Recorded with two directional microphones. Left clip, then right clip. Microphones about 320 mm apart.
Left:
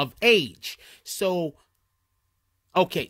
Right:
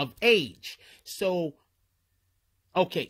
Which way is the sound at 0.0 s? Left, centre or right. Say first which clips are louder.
Left 3 dB; centre.